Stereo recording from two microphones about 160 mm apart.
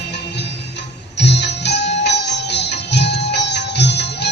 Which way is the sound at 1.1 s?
90° left.